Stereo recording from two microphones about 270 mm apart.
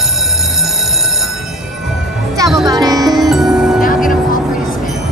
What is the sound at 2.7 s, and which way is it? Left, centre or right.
Music, centre.